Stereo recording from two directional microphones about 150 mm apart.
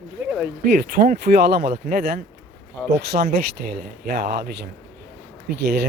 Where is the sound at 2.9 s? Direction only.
90° right.